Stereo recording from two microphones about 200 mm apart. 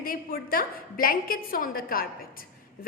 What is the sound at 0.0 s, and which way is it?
A woman's voice, 45° left (ahead or behind).